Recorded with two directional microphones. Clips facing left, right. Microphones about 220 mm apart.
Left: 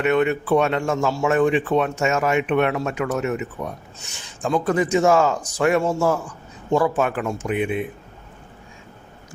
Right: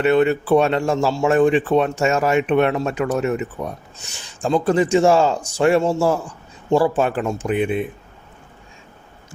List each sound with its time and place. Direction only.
0.0 s speech: 35° right (ahead or behind)